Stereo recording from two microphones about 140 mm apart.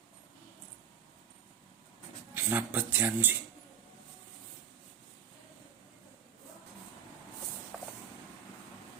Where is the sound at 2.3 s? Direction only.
15° right (ahead or behind).